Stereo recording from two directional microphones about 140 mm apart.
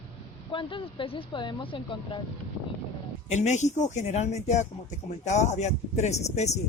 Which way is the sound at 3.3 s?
55° left (ahead or behind).